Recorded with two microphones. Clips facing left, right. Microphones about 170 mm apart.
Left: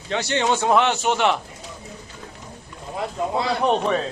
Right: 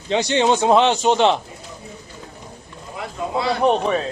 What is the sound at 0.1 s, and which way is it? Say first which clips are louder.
A man's voice: right 4 dB; 20° right (ahead or behind).